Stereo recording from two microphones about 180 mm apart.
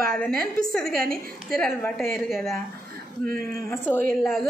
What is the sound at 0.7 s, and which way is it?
Speech, centre (ahead or behind).